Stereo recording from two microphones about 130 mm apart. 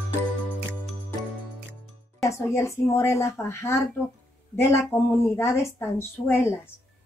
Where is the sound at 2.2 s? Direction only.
20° left (ahead or behind).